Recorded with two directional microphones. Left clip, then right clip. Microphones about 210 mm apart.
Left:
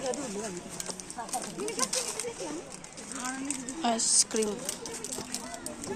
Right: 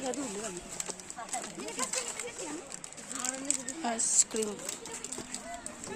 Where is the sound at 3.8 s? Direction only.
5° left (ahead or behind).